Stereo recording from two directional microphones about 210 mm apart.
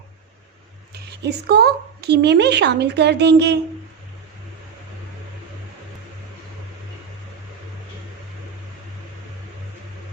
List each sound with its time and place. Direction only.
1.2 s a woman's voice: 50° right (ahead or behind)